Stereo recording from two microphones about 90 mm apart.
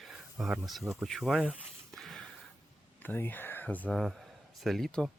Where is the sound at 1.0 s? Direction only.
Centre (ahead or behind).